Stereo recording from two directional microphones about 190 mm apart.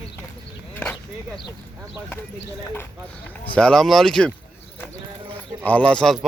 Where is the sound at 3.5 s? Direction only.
5° left (ahead or behind).